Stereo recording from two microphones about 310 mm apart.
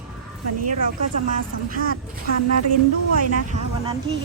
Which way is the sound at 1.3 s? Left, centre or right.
Right.